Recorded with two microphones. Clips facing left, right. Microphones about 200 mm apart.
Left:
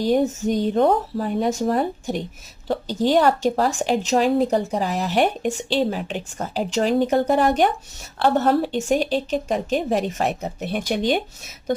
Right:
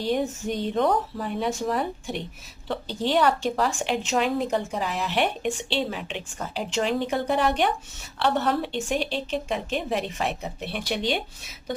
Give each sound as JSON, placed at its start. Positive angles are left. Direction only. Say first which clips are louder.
{"t": 0.0, "sound": "a woman's voice", "louder": "left 6 dB", "side_deg": 40}